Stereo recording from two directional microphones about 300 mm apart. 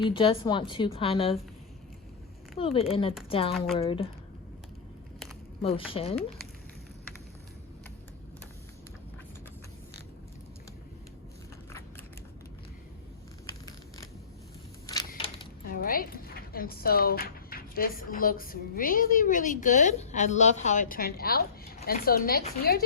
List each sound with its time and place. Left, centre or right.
0.1 s a woman's voice: centre
2.6 s a woman's voice: centre
5.6 s a woman's voice: centre
15.1 s a woman's voice: left